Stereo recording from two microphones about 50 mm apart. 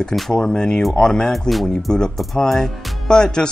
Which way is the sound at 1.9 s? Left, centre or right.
Centre.